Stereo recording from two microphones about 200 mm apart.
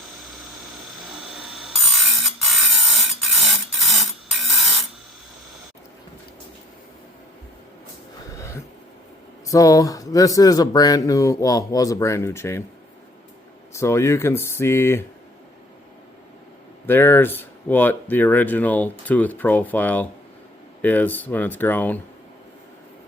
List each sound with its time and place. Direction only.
1.3 s ratchet: centre (ahead or behind)
8.3 s a sound: 15° left (ahead or behind)
9.5 s speech: 15° left (ahead or behind)
13.7 s speech: 15° left (ahead or behind)
16.8 s speech: 10° left (ahead or behind)